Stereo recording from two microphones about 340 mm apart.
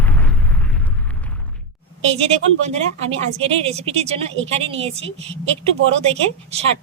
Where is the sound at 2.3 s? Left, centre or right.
Centre.